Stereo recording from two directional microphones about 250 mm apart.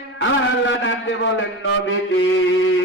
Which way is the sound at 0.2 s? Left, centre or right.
Left.